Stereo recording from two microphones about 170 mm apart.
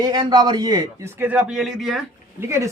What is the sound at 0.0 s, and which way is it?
A man's voice, 25° right (ahead or behind).